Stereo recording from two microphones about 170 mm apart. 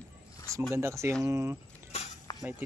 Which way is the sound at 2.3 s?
20° left (ahead or behind).